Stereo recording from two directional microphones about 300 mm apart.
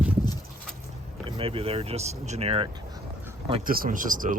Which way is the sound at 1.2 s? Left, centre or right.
Centre.